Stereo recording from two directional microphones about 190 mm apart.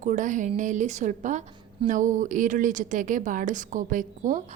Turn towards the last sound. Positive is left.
turn(degrees=-40)  # may be behind; listen again after turning